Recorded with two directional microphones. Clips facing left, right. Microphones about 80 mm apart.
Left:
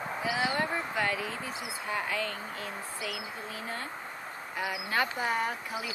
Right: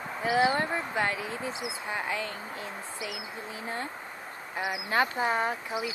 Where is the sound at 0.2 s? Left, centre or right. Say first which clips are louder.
Right 7 dB; right.